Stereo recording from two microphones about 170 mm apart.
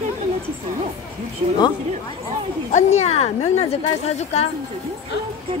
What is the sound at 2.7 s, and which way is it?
A woman's voice, 40° left (ahead or behind).